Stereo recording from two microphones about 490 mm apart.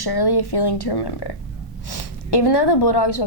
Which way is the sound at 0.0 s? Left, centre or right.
Left.